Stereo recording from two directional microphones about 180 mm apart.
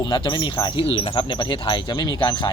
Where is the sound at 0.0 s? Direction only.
25° left (ahead or behind).